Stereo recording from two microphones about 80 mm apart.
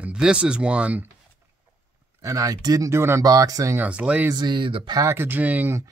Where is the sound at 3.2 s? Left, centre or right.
Right.